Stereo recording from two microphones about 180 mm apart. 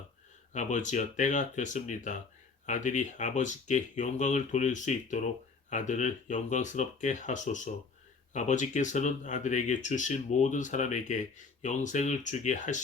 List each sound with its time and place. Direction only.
0.5 s speech: 40° left (ahead or behind)